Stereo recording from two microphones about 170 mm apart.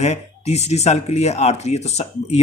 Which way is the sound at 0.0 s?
40° left (ahead or behind).